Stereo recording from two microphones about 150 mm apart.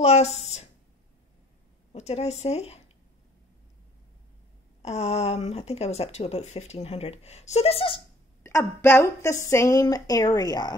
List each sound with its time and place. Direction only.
0.0 s speech: 45° left (ahead or behind)
1.9 s speech: 45° left (ahead or behind)
4.8 s speech: 45° left (ahead or behind)
8.5 s a woman's voice: 15° left (ahead or behind)